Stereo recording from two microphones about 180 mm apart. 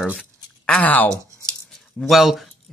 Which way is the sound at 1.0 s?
15° right (ahead or behind).